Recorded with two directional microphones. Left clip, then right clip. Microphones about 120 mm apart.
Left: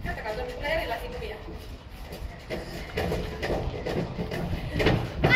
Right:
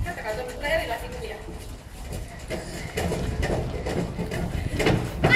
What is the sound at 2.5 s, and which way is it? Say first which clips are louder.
Music: right 2 dB; 25° left (ahead or behind).